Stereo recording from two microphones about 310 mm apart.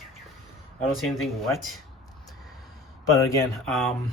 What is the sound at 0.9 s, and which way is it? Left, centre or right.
Speech, centre.